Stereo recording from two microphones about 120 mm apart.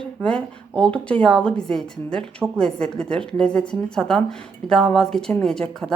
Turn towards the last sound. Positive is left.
turn(degrees=5)  # may be behind; listen again after turning